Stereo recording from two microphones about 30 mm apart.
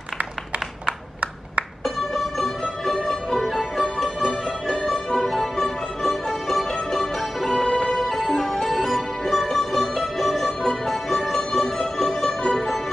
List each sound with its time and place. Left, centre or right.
0.8 s a sound: right
2.1 s music: centre
4.2 s music: centre
5.1 s music: centre
5.4 s music: centre
7.6 s music: left
8.0 s music: centre; by 12.6 s left